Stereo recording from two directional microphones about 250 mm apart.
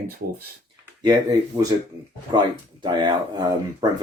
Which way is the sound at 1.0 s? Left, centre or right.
Centre.